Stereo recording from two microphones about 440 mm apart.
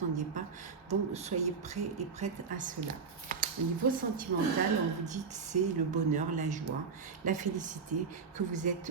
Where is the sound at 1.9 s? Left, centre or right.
Centre.